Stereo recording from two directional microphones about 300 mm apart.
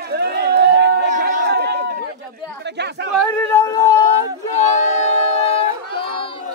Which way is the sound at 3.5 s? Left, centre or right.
Centre.